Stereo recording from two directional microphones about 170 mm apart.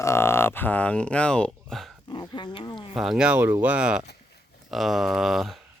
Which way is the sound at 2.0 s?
25° left (ahead or behind).